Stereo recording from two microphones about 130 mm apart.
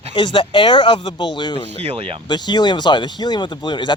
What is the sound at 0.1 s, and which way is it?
Speech, 40° left (ahead or behind).